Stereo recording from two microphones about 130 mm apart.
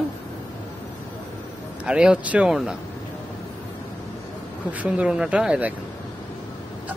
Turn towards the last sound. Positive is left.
turn(degrees=-10)  # may be behind; listen again after turning